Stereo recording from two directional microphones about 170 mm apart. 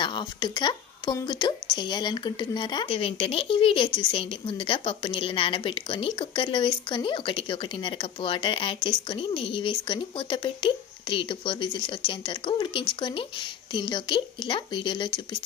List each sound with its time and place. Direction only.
0.0 s speech: 25° left (ahead or behind)